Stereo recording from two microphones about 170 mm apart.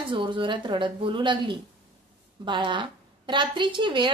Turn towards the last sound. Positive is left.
turn(degrees=-30)  # may be behind; listen again after turning